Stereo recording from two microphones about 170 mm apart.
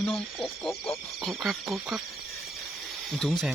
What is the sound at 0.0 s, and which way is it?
Speech, centre (ahead or behind).